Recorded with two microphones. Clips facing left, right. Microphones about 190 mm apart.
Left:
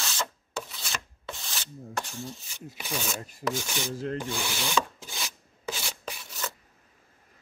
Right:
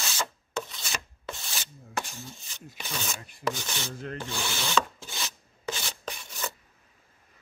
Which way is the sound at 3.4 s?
10° left (ahead or behind).